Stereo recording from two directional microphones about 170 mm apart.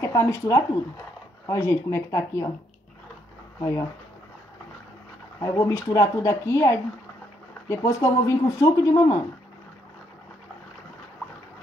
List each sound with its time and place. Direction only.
0.0 s speech: 20° left (ahead or behind)
5.4 s speech: 20° left (ahead or behind)